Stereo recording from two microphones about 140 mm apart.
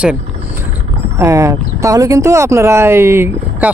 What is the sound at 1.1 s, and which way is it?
Speech, 20° right (ahead or behind).